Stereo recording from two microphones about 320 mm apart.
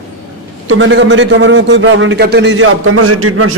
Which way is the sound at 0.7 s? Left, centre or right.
Right.